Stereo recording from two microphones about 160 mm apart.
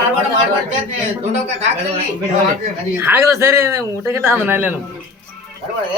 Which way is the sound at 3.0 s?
15° right (ahead or behind).